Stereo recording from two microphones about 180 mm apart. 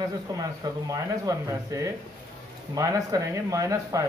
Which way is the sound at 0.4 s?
20° right (ahead or behind).